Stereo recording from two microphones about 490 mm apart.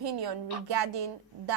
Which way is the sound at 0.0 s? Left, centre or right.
Right.